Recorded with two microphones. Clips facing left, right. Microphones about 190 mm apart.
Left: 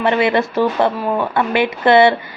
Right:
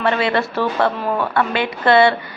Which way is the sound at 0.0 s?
20° left (ahead or behind).